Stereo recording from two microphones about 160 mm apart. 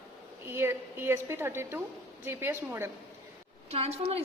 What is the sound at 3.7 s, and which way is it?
Speech, 40° right (ahead or behind).